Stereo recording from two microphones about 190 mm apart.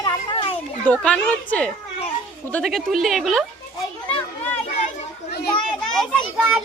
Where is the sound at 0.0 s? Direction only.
25° left (ahead or behind).